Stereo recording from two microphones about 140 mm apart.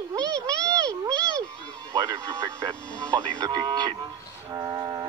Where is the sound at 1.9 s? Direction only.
25° right (ahead or behind).